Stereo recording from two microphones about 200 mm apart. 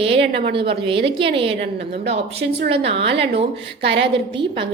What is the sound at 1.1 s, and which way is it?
Speech, 25° right (ahead or behind).